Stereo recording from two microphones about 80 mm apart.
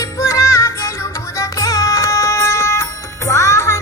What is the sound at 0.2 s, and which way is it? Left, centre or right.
Music, left.